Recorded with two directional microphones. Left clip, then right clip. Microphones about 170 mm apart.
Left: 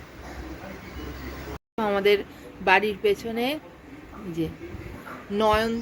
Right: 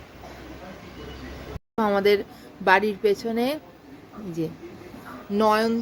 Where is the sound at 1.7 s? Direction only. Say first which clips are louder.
Right 1 dB; 30° right (ahead or behind).